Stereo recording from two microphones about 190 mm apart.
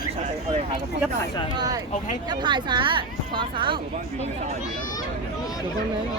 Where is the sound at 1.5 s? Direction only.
20° right (ahead or behind).